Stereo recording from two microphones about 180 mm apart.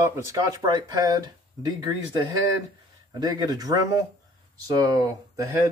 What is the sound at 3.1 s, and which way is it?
Speech, 20° right (ahead or behind).